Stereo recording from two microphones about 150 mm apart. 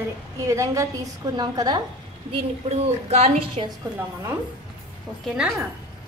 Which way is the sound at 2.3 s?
45° right (ahead or behind).